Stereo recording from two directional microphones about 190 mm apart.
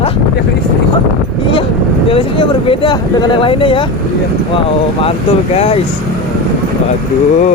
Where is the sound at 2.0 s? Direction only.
30° left (ahead or behind).